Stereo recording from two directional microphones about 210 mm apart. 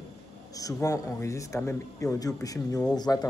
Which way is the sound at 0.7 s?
15° left (ahead or behind).